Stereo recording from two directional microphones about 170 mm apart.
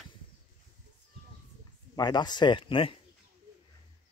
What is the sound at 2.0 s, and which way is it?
Speech, 25° left (ahead or behind).